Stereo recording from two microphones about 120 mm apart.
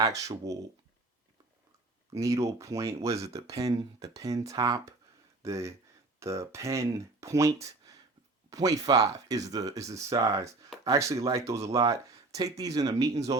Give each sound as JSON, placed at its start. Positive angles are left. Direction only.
{"t": 0.0, "sound": "speech", "side_deg": -30}
{"t": 2.1, "sound": "speech", "side_deg": -25}